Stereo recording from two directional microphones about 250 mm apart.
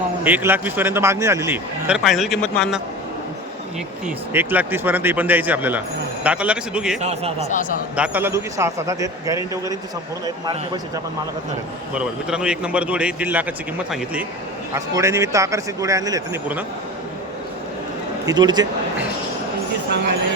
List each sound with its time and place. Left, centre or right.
0.3 s a man's voice: centre
4.0 s a man's voice: centre
7.0 s a man's voice: right
7.9 s a man's voice: centre
11.9 s a man's voice: centre
18.3 s a man's voice: centre